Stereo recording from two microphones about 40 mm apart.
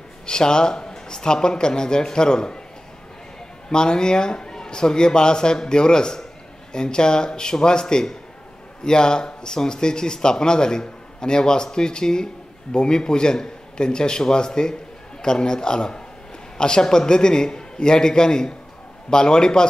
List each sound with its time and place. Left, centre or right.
0.3 s speech: centre
3.7 s speech: centre